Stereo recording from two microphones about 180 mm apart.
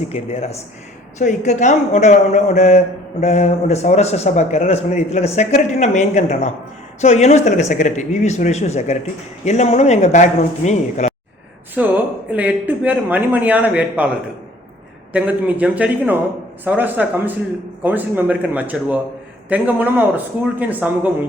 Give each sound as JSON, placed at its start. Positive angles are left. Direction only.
{"t": 0.0, "sound": "a man's voice", "side_deg": 35}
{"t": 11.7, "sound": "speech", "side_deg": -10}
{"t": 15.1, "sound": "speech", "side_deg": -10}